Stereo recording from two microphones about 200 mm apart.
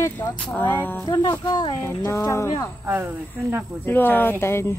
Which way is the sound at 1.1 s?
20° left (ahead or behind).